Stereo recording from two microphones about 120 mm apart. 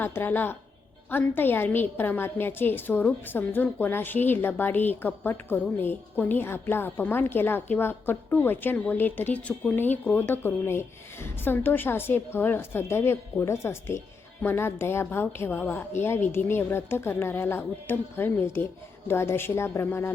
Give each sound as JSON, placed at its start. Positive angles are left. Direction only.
{"t": 0.0, "sound": "a woman's voice", "side_deg": 15}